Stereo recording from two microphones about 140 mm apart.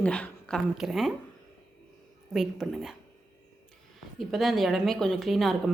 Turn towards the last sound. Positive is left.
turn(degrees=0)  # may be behind; listen again after turning